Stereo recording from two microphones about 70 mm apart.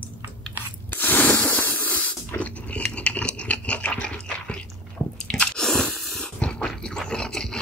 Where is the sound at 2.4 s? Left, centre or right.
Centre.